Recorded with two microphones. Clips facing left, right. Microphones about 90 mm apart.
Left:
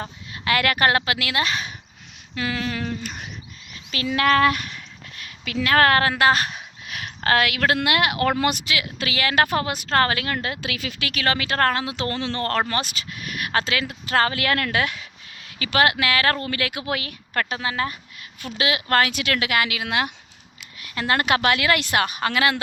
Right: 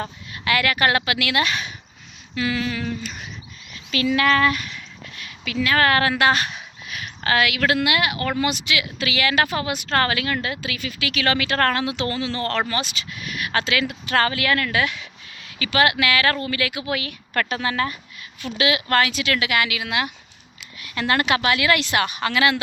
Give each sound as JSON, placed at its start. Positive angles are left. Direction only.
{"t": 0.4, "sound": "speech", "side_deg": 45}
{"t": 0.9, "sound": "speech", "side_deg": 30}
{"t": 3.9, "sound": "a sound", "side_deg": 40}
{"t": 6.0, "sound": "speech", "side_deg": 35}
{"t": 7.8, "sound": "speech", "side_deg": 55}
{"t": 8.6, "sound": "speech", "side_deg": 35}
{"t": 10.6, "sound": "speech", "side_deg": 65}
{"t": 11.1, "sound": "speech", "side_deg": 35}
{"t": 12.1, "sound": "speech", "side_deg": 50}
{"t": 14.4, "sound": "speech", "side_deg": 55}
{"t": 17.3, "sound": "a woman's voice", "side_deg": 20}
{"t": 18.4, "sound": "speech", "side_deg": 35}
{"t": 21.2, "sound": "speech", "side_deg": 45}